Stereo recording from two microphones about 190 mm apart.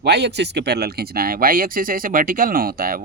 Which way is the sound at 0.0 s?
60° right (ahead or behind).